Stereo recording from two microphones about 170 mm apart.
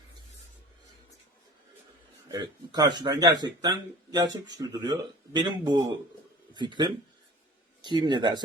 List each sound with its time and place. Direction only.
2.3 s speech: 25° right (ahead or behind)